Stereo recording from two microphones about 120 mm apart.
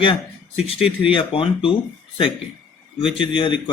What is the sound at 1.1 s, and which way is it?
Speech, 45° left (ahead or behind).